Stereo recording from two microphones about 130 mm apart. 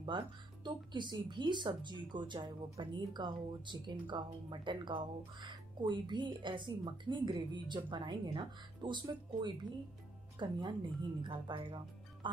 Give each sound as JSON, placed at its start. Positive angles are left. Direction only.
{"t": 0.1, "sound": "speech", "side_deg": -35}